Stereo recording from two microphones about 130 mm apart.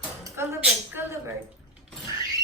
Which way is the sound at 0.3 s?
20° right (ahead or behind).